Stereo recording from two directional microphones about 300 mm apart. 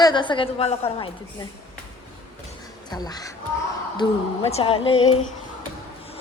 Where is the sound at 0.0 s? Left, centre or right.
Centre.